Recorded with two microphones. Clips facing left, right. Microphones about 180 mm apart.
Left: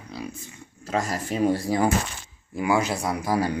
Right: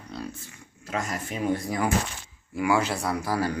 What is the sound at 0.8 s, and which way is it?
Speech, 35° left (ahead or behind).